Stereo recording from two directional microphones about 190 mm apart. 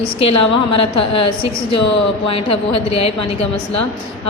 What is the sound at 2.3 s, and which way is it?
A woman's voice, 30° left (ahead or behind).